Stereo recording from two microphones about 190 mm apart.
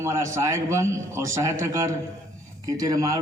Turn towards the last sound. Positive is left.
turn(degrees=-15)  # may be behind; listen again after turning